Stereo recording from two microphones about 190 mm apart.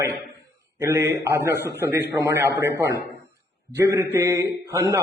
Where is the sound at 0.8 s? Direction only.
15° right (ahead or behind).